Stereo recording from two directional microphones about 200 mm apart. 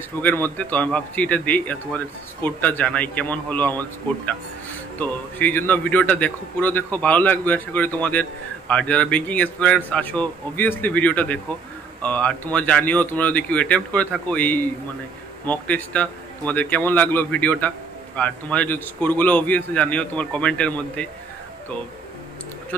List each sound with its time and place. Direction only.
0.2 s a man's voice: 10° left (ahead or behind)
4.9 s a man's voice: 10° left (ahead or behind)